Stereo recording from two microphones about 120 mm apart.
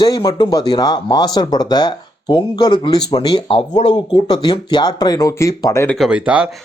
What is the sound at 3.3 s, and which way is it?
A man's voice, 45° left (ahead or behind).